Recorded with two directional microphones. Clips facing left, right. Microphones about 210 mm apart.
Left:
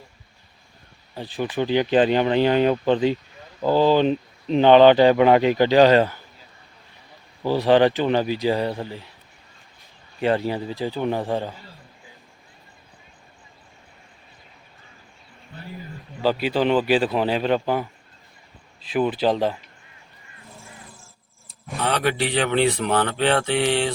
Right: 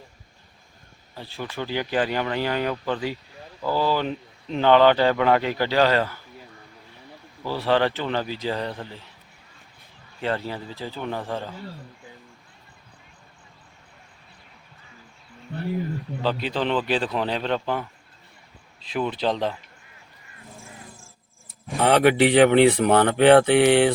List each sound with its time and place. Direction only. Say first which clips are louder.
1.1 s speech: left 7 dB; 15° left (ahead or behind)
7.4 s a man's voice: left 5 dB; 15° left (ahead or behind)
10.2 s a man's voice: left 6 dB; 15° left (ahead or behind)
15.5 s speech: right 10 dB; 65° right (ahead or behind)
16.2 s a man's voice: left 5 dB; 5° left (ahead or behind)
21.8 s speech: right 6 dB; 20° right (ahead or behind)
22.3 s mantra: right 5 dB; 15° right (ahead or behind)